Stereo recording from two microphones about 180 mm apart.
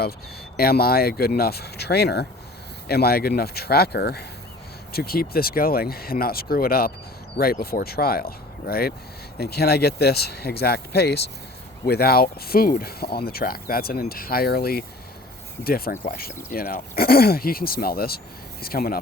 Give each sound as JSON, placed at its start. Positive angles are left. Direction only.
{"t": 0.5, "sound": "speech", "side_deg": 55}